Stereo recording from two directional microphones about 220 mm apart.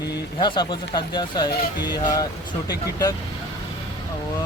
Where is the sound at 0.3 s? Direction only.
20° left (ahead or behind).